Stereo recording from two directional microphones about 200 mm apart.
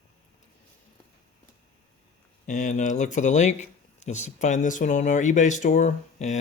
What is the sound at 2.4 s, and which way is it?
Speech, 40° left (ahead or behind).